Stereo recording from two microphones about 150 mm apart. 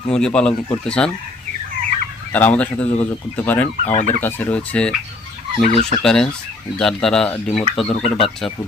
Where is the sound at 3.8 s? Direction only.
50° left (ahead or behind).